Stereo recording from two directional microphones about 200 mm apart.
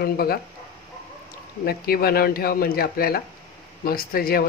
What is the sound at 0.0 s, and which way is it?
Speech, 50° left (ahead or behind).